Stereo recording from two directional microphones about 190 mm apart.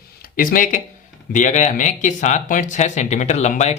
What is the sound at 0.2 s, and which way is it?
Speech, 45° left (ahead or behind).